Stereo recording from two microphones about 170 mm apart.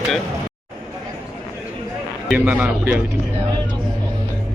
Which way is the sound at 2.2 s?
10° right (ahead or behind).